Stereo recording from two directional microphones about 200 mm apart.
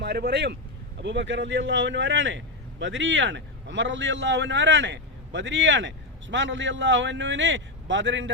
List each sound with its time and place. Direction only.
0.0 s a man's voice: 55° right (ahead or behind)